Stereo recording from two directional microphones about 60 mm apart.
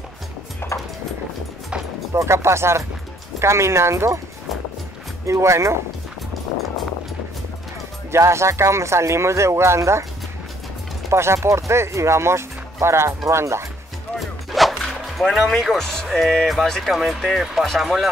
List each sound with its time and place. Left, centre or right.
0.6 s dog: left
2.1 s speech: right
5.2 s speech: right
8.1 s speech: right
11.1 s speech: right
14.2 s music: centre
15.2 s speech: centre
15.8 s speech: centre